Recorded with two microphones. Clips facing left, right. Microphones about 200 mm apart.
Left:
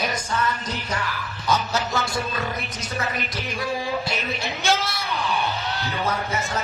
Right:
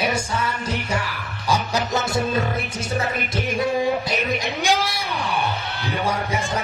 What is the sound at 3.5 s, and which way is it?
Music, 25° right (ahead or behind).